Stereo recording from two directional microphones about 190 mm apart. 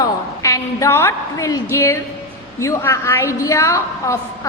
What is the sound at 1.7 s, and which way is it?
A woman's voice, 15° left (ahead or behind).